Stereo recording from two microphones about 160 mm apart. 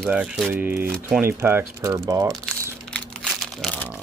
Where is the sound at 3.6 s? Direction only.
10° left (ahead or behind).